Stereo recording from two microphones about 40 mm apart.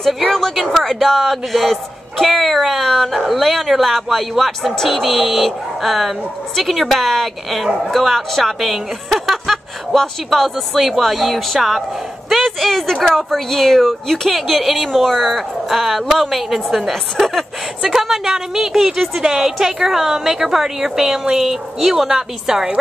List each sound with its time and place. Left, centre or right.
0.0 s a man's voice: centre
14.3 s a man's voice: centre
17.8 s a woman's voice: centre